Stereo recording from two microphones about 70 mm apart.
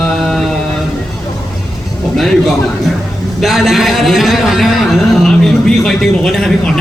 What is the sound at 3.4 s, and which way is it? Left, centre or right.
A man's voice, centre.